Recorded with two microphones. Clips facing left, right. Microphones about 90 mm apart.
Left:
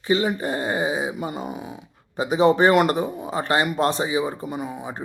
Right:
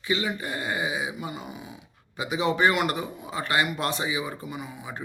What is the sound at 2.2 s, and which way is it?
Speech, 35° left (ahead or behind).